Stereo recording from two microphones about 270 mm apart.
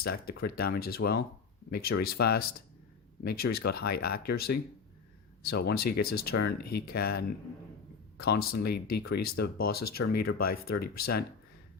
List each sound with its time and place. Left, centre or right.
0.0 s speech: left
9.7 s speech: left
10.1 s speech: left
10.4 s speech: left
11.0 s speech: left